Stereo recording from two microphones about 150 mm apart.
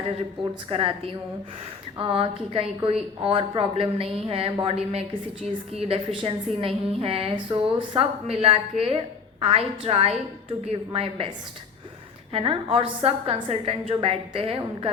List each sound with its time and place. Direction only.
0.7 s a woman's voice: 40° right (ahead or behind)
12.3 s a woman's voice: 35° right (ahead or behind)